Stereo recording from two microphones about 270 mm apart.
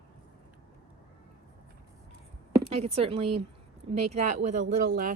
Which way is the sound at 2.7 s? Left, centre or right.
Right.